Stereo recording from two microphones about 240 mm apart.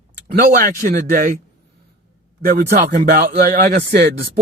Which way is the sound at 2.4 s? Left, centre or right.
Right.